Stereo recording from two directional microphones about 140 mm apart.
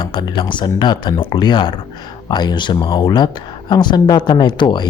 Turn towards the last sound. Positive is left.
turn(degrees=30)  # may be behind; listen again after turning